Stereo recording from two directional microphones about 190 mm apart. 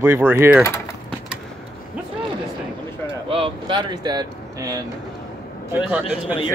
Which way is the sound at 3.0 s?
30° right (ahead or behind).